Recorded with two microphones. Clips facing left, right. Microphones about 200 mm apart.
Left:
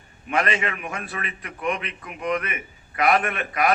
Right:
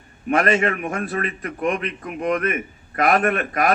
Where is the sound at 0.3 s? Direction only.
45° right (ahead or behind).